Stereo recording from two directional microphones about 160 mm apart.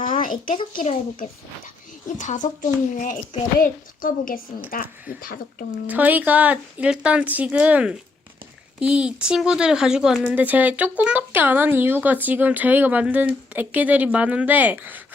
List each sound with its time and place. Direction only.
0.2 s a sound: 60° left (ahead or behind)
0.5 s speech: 30° left (ahead or behind)
1.1 s speech: 55° left (ahead or behind)
5.9 s speech: 10° right (ahead or behind)